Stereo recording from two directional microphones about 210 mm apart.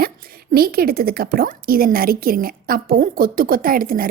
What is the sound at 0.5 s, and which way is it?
A woman's voice, 45° right (ahead or behind).